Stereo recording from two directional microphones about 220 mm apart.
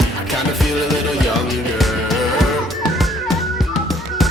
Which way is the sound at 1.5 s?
Centre (ahead or behind).